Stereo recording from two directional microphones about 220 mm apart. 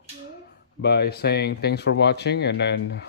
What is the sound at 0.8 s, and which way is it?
Speech, 50° left (ahead or behind).